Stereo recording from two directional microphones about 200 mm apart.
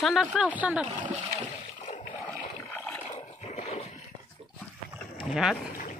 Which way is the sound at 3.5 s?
30° left (ahead or behind).